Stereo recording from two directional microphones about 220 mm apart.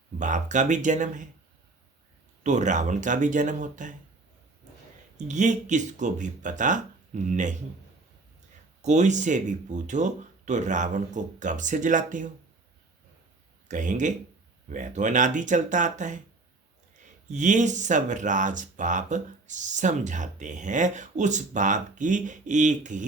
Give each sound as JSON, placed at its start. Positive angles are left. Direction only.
{"t": 0.2, "sound": "speech", "side_deg": -35}
{"t": 2.4, "sound": "speech", "side_deg": -35}
{"t": 5.1, "sound": "speech", "side_deg": -35}
{"t": 8.8, "sound": "speech", "side_deg": -30}
{"t": 13.7, "sound": "speech", "side_deg": -35}
{"t": 17.3, "sound": "speech", "side_deg": -35}